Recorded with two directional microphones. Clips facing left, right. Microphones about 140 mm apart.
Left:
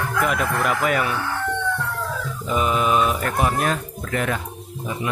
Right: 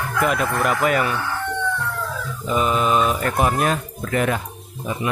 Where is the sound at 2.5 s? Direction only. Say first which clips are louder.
Right 1 dB; 5° left (ahead or behind).